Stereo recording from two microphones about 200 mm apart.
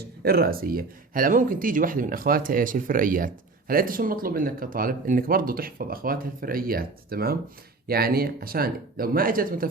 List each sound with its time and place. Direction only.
0.0 s speech: 50° right (ahead or behind)